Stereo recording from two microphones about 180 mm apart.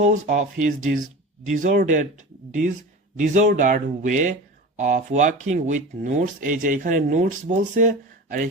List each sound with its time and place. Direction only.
0.0 s speech: 40° right (ahead or behind)
3.2 s speech: 45° right (ahead or behind)